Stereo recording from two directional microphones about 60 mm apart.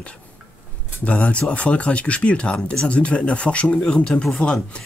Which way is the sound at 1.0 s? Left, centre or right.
Left.